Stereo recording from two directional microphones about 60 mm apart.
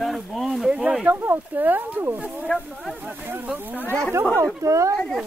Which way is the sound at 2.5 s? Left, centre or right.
Centre.